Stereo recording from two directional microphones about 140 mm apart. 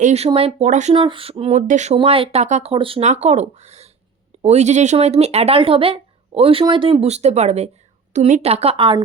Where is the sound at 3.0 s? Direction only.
55° right (ahead or behind).